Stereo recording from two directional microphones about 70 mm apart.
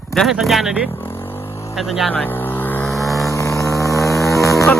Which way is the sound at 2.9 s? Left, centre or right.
Centre.